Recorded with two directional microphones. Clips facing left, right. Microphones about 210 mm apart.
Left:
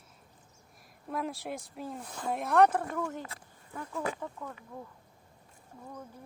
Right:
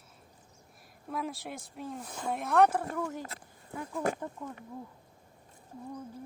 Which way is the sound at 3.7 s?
15° right (ahead or behind).